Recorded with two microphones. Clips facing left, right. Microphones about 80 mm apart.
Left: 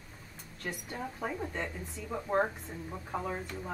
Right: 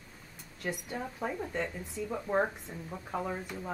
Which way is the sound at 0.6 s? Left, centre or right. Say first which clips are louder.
Right 3 dB; centre.